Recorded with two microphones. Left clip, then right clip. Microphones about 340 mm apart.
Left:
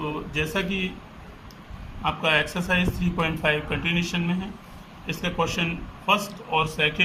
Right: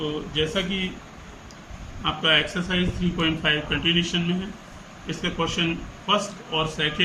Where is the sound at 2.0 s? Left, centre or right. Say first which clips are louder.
Right 1 dB; centre.